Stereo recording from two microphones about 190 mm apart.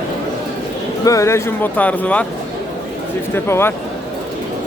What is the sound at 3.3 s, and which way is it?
Speech, 10° left (ahead or behind).